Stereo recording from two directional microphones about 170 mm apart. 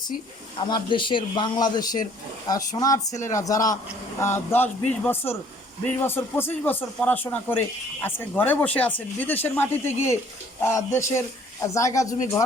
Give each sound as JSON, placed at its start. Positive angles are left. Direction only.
{"t": 0.6, "sound": "speech", "side_deg": 30}